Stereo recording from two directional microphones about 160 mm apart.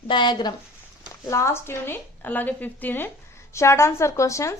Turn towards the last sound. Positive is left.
turn(degrees=20)  # may be behind; listen again after turning